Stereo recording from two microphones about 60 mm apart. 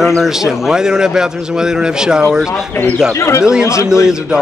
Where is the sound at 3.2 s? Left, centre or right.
Left.